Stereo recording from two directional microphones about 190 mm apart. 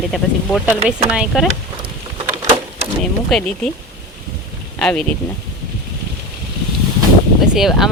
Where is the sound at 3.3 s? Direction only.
5° left (ahead or behind).